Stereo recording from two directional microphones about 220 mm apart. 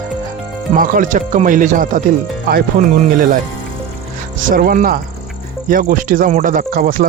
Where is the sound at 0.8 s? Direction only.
35° right (ahead or behind).